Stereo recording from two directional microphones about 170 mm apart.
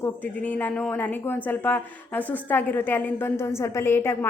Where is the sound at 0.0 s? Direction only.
10° left (ahead or behind).